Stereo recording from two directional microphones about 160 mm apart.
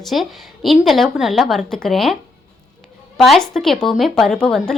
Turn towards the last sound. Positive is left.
turn(degrees=5)  # may be behind; listen again after turning